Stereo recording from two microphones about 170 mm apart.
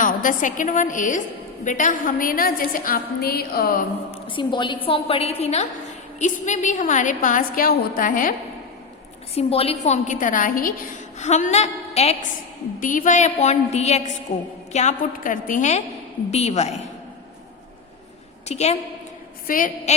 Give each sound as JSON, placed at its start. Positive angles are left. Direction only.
{"t": 0.0, "sound": "a woman's voice", "side_deg": 50}
{"t": 4.3, "sound": "a woman's voice", "side_deg": 30}
{"t": 9.3, "sound": "a woman's voice", "side_deg": 35}
{"t": 11.2, "sound": "a woman's voice", "side_deg": 45}
{"t": 12.8, "sound": "a woman's voice", "side_deg": 50}
{"t": 18.4, "sound": "a woman's voice", "side_deg": 40}
{"t": 19.5, "sound": "a woman's voice", "side_deg": 50}